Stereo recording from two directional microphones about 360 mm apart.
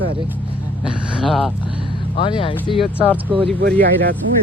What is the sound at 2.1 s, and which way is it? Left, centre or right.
Speech, centre.